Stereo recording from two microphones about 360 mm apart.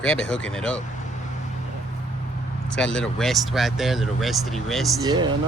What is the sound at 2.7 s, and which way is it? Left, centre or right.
Speech, centre.